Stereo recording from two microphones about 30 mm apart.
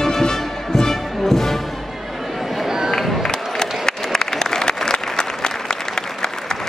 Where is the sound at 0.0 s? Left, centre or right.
Centre.